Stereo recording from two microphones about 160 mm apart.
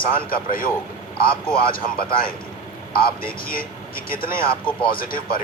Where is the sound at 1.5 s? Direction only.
65° left (ahead or behind).